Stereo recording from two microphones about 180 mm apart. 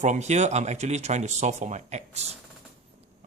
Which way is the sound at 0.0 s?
40° right (ahead or behind).